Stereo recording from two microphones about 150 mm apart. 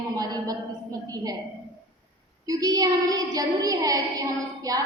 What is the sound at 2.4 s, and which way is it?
A woman's voice, 25° right (ahead or behind).